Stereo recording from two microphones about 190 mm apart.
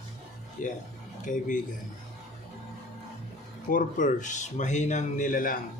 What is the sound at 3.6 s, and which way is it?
Speech, 45° left (ahead or behind).